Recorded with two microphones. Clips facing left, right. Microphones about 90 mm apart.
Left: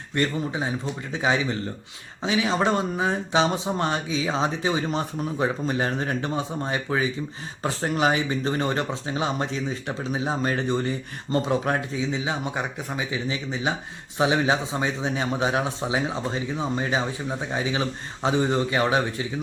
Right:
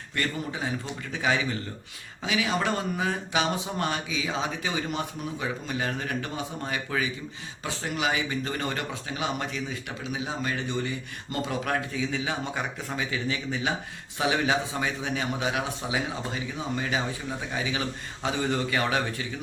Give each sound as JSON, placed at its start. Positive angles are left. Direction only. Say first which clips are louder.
{"t": 0.1, "sound": "a man's voice", "louder": "left 5 dB", "side_deg": 25}
{"t": 7.6, "sound": "a man's voice", "louder": "left 6 dB", "side_deg": 40}